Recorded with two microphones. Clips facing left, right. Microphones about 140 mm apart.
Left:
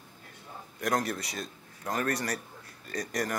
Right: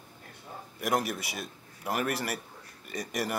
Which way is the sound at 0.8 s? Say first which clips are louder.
Even; 5° right (ahead or behind).